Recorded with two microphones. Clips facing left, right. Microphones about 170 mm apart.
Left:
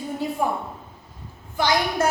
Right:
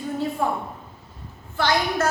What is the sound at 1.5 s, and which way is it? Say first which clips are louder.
Speech: even; 15° left (ahead or behind).